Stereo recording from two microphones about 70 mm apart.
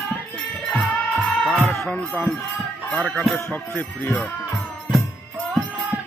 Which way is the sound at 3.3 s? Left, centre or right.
Left.